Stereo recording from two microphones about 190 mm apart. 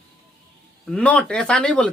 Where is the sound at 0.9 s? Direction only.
5° left (ahead or behind).